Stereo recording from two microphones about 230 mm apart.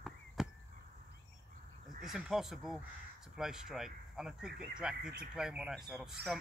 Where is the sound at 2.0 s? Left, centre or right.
Centre.